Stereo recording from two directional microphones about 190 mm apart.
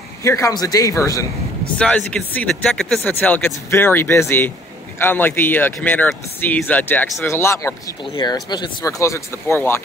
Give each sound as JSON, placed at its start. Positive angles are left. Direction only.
{"t": 0.2, "sound": "speech", "side_deg": 15}
{"t": 1.8, "sound": "speech", "side_deg": 5}